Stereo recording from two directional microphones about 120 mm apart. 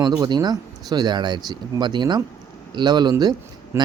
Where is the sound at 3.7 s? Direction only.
25° right (ahead or behind).